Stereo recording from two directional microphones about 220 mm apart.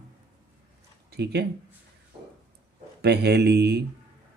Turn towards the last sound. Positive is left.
turn(degrees=-50)  # may be behind; listen again after turning